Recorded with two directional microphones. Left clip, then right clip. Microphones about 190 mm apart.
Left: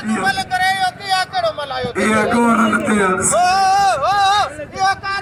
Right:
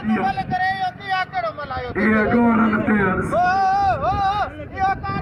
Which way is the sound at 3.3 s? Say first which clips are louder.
Left 4 dB; 15° right (ahead or behind).